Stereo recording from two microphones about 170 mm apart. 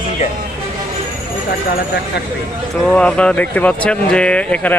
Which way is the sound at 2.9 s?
5° left (ahead or behind).